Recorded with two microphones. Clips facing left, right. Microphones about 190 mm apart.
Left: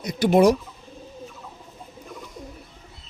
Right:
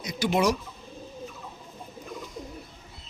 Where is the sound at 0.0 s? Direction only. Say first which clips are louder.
Left 8 dB; 55° left (ahead or behind).